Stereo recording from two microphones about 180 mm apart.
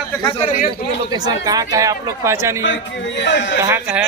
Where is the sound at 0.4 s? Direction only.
45° left (ahead or behind).